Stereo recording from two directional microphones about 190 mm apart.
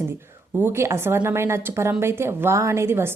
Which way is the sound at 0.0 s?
15° right (ahead or behind).